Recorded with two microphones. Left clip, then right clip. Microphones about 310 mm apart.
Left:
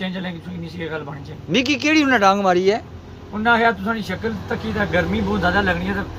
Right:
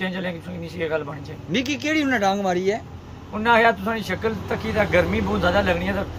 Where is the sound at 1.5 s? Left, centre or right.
Centre.